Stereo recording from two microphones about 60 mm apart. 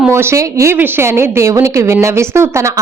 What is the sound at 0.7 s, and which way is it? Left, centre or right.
Speech, right.